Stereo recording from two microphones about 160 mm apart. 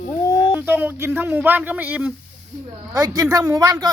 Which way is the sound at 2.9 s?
20° right (ahead or behind).